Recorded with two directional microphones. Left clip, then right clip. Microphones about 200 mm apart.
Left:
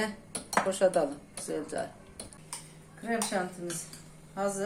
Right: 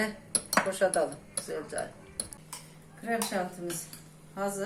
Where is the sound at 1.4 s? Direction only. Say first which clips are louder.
Left 2 dB; 40° left (ahead or behind).